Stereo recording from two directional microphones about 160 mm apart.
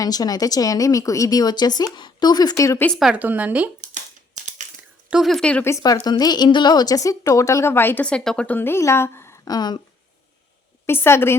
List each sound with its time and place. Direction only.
0.0 s a woman's voice: 25° left (ahead or behind)
2.8 s speech: centre (ahead or behind)
5.1 s a woman's voice: centre (ahead or behind)
5.7 s a woman's voice: 25° left (ahead or behind)
10.8 s a woman's voice: 15° left (ahead or behind)